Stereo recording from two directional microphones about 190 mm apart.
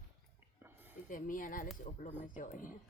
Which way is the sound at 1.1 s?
45° left (ahead or behind).